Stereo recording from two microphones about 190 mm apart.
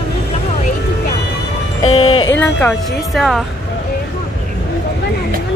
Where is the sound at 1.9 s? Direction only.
30° left (ahead or behind).